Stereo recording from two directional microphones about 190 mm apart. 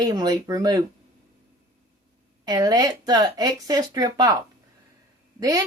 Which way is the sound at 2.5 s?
20° right (ahead or behind).